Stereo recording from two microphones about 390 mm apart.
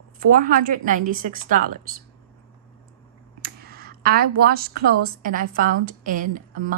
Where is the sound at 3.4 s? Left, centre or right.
Right.